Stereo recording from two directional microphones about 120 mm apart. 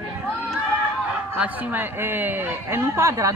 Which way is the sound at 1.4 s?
15° right (ahead or behind).